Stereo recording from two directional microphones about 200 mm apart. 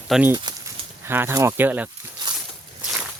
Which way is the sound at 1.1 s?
10° right (ahead or behind).